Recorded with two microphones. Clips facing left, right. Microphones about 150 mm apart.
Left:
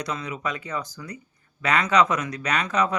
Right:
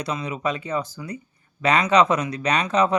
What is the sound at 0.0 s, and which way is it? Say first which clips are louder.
Speech: right 4 dB; 25° right (ahead or behind).